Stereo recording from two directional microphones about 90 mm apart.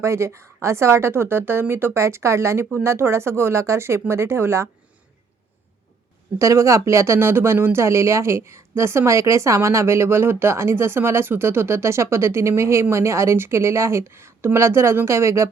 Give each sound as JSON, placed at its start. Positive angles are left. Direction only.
{"t": 0.0, "sound": "speech", "side_deg": -30}
{"t": 6.4, "sound": "speech", "side_deg": -35}